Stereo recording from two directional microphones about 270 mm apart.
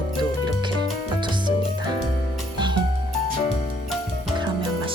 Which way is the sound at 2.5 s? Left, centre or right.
Centre.